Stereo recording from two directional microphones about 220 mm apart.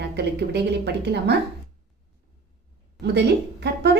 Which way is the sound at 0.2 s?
50° right (ahead or behind).